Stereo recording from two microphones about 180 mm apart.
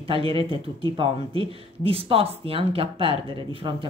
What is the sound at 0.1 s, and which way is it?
Speech, 30° right (ahead or behind).